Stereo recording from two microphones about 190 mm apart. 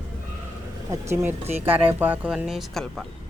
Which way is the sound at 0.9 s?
15° right (ahead or behind).